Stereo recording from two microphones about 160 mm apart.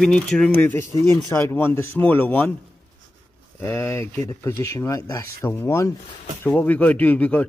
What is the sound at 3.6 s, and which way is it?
Speech, 15° left (ahead or behind).